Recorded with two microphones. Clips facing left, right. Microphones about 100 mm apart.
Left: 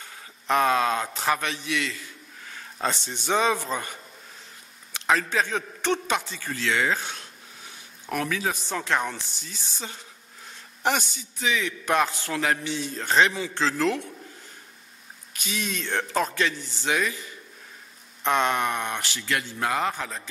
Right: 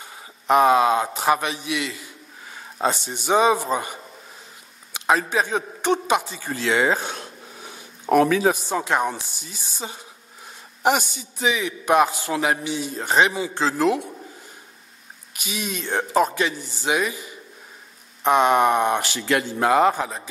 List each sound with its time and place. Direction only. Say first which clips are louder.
0.0 s a man's voice: right 4 dB; 15° right (ahead or behind)
7.0 s a sound: right 5 dB; 45° right (ahead or behind)
8.2 s speech: right 10 dB; 30° right (ahead or behind)
8.5 s a man's voice: right 4 dB; 10° right (ahead or behind)
15.3 s a man's voice: right 2 dB; 15° right (ahead or behind)